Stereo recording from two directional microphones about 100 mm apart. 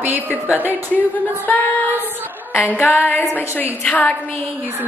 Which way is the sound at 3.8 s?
15° left (ahead or behind).